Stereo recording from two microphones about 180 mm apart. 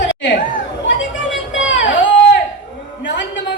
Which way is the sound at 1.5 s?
90° left.